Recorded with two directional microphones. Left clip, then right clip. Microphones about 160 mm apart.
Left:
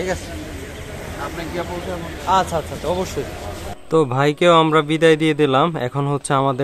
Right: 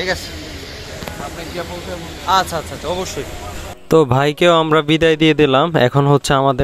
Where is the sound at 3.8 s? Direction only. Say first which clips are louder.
Right 4 dB; 60° right (ahead or behind).